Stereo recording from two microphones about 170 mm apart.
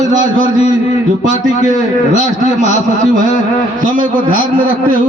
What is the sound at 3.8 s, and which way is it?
Speech, 50° right (ahead or behind).